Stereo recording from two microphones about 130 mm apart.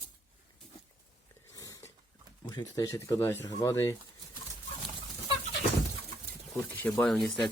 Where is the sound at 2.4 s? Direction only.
30° left (ahead or behind).